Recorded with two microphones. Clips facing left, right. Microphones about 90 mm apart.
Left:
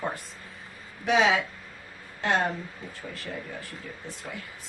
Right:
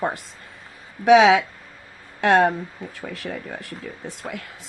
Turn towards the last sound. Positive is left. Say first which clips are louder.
# right 6 dB
turn(degrees=-75)  # may be behind; listen again after turning